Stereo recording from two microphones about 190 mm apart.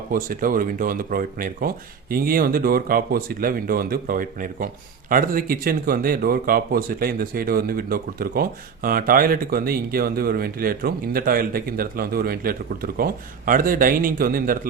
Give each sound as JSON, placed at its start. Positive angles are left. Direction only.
{"t": 0.1, "sound": "speech", "side_deg": -45}